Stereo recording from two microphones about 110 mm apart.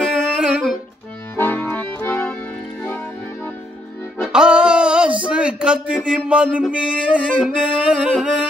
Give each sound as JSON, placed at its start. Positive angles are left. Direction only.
{"t": 0.0, "sound": "music", "side_deg": -5}
{"t": 1.3, "sound": "accordion", "side_deg": 20}
{"t": 4.3, "sound": "music", "side_deg": -10}
{"t": 5.3, "sound": "a sound", "side_deg": -10}